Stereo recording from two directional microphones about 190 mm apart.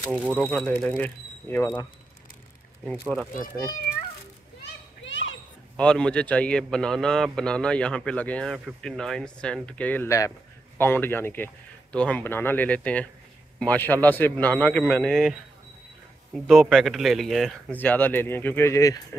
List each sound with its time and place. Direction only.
0.1 s speech: 5° right (ahead or behind)
0.5 s speech: 5° left (ahead or behind)
2.8 s speech: 5° right (ahead or behind)
5.0 s children playing: 90° left
5.8 s speech: 5° left (ahead or behind)
16.4 s speech: centre (ahead or behind); by 18.9 s 15° left (ahead or behind)